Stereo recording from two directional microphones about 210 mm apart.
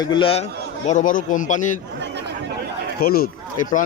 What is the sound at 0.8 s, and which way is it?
Speech, 35° left (ahead or behind).